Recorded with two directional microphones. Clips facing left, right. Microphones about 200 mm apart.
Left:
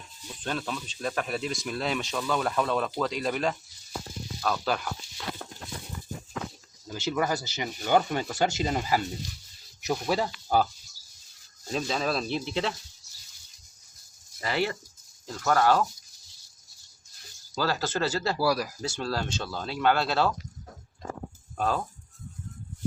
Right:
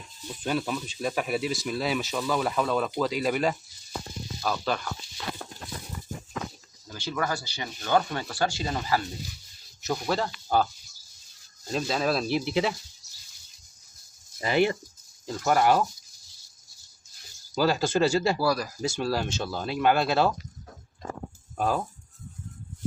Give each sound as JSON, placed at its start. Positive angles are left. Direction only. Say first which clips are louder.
{"t": 0.4, "sound": "speech", "louder": "right 4 dB", "side_deg": -10}
{"t": 4.4, "sound": "speech", "louder": "even", "side_deg": 5}
{"t": 6.9, "sound": "speech", "louder": "left 2 dB", "side_deg": 20}
{"t": 11.7, "sound": "speech", "louder": "right 2 dB", "side_deg": 0}
{"t": 14.4, "sound": "speech", "louder": "right 5 dB", "side_deg": -20}
{"t": 17.5, "sound": "speech", "louder": "right 5 dB", "side_deg": -15}
{"t": 18.3, "sound": "speech", "louder": "even", "side_deg": 10}
{"t": 18.8, "sound": "speech", "louder": "right 3 dB", "side_deg": -10}
{"t": 21.6, "sound": "speech", "louder": "right 1 dB", "side_deg": -10}